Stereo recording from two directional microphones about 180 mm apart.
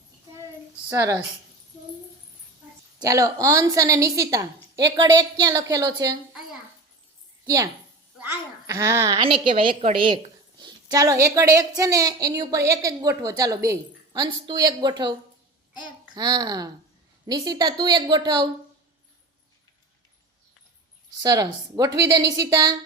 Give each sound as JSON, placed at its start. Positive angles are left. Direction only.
{"t": 0.9, "sound": "a woman's voice", "side_deg": -20}
{"t": 3.0, "sound": "a woman's voice", "side_deg": -20}
{"t": 7.4, "sound": "a woman's voice", "side_deg": -20}
{"t": 16.1, "sound": "a woman's voice", "side_deg": -25}
{"t": 21.2, "sound": "a woman's voice", "side_deg": -20}